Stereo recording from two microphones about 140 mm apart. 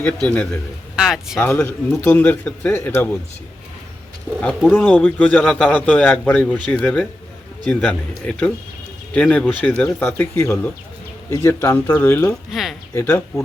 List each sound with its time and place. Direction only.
0.0 s speech: 10° left (ahead or behind)
1.0 s speech: centre (ahead or behind)
1.4 s speech: 10° left (ahead or behind)
4.7 s speech: 15° left (ahead or behind)
12.3 s speech: centre (ahead or behind)
12.9 s speech: 15° left (ahead or behind)